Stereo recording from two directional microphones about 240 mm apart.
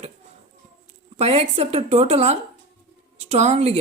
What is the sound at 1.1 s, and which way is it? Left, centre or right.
A woman's voice, right.